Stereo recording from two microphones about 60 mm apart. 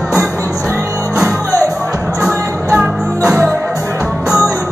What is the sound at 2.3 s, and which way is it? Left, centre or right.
Music, centre.